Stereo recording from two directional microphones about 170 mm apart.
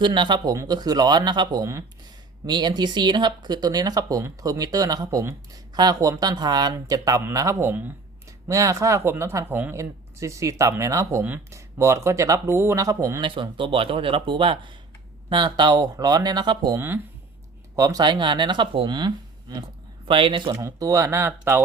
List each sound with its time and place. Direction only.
0.0 s speech: 25° right (ahead or behind)